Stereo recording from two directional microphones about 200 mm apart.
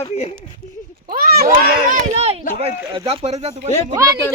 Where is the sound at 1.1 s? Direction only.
50° right (ahead or behind).